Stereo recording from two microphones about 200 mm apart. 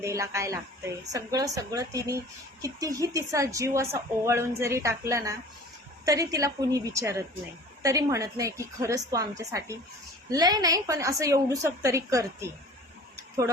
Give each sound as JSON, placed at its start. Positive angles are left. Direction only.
{"t": 0.0, "sound": "speech", "side_deg": -15}